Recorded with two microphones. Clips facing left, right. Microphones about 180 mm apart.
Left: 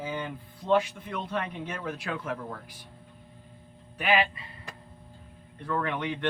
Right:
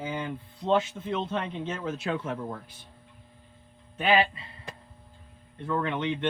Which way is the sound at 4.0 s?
25° right (ahead or behind).